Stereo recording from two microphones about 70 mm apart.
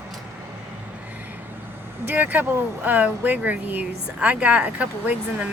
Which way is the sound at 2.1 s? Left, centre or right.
Right.